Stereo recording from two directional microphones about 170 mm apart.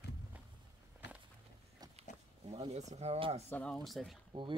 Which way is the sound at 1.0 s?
15° right (ahead or behind).